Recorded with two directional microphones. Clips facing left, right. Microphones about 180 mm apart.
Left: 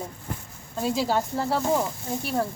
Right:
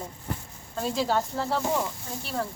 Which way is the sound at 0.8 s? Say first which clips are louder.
Left 2 dB; 10° left (ahead or behind).